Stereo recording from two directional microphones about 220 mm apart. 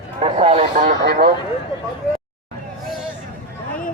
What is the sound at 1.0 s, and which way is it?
Speech, 45° right (ahead or behind).